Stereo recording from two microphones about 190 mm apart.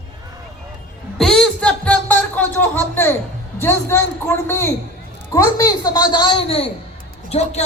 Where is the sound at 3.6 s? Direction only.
10° left (ahead or behind).